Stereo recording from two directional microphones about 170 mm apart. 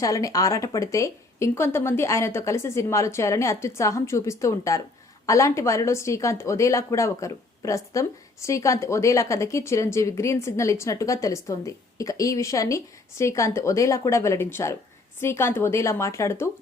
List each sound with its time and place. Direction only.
0.0 s a woman's voice: 20° left (ahead or behind)